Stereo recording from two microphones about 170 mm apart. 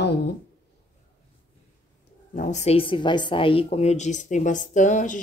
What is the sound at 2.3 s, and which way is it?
A woman's voice, 45° left (ahead or behind).